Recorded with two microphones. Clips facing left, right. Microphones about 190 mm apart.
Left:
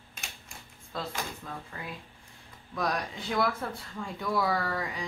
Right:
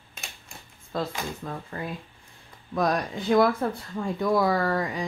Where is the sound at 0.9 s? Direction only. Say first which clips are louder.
Right 6 dB; 45° right (ahead or behind).